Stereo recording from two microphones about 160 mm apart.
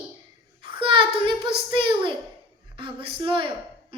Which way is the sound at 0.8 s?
30° right (ahead or behind).